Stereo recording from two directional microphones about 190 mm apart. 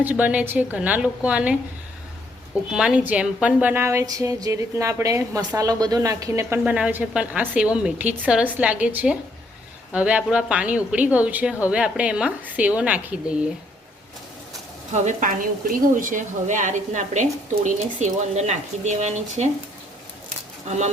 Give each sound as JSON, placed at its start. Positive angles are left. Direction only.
{"t": 0.0, "sound": "a woman's voice", "side_deg": -10}
{"t": 2.7, "sound": "a woman's voice", "side_deg": -5}
{"t": 14.9, "sound": "a woman's voice", "side_deg": -40}
{"t": 20.7, "sound": "a woman's voice", "side_deg": -35}